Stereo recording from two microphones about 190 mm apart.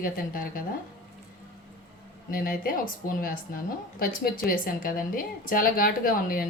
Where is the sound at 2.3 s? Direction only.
50° left (ahead or behind).